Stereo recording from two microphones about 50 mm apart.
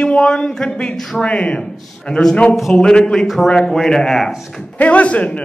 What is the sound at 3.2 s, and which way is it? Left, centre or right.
Speech, centre.